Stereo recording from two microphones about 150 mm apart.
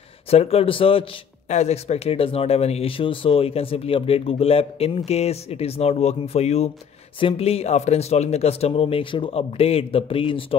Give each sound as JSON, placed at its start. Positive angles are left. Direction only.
{"t": 0.3, "sound": "speech", "side_deg": 40}
{"t": 1.5, "sound": "speech", "side_deg": 50}